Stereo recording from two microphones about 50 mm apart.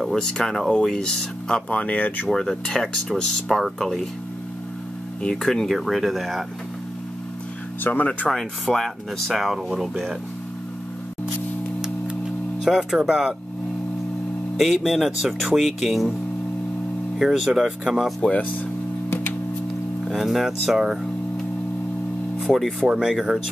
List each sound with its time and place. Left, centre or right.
0.1 s speech: centre
1.7 s speech: left
2.3 s speech: centre
5.4 s speech: centre
7.8 s speech: left
8.3 s speech: centre
12.6 s speech: centre
14.6 s speech: centre
17.2 s speech: centre
18.3 s speech: left
19.0 s music: left
20.1 s speech: centre
22.4 s music: centre
22.8 s speech: centre